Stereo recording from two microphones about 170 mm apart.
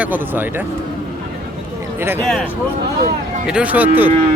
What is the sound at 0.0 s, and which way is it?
Speech, 10° right (ahead or behind).